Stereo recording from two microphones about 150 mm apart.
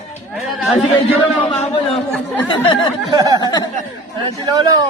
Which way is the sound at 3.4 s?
25° left (ahead or behind).